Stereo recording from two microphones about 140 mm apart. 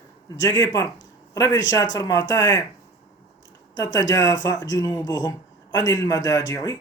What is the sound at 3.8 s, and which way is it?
Speech, 25° left (ahead or behind).